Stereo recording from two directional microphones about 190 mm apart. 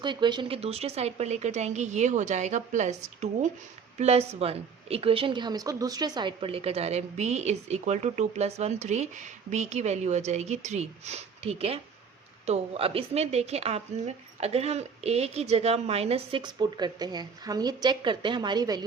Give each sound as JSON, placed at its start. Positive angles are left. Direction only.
{"t": 0.0, "sound": "a woman's voice", "side_deg": -25}